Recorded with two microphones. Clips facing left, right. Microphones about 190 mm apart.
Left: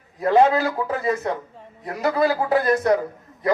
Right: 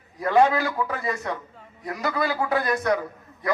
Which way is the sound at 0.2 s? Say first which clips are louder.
Left 3 dB; 30° left (ahead or behind).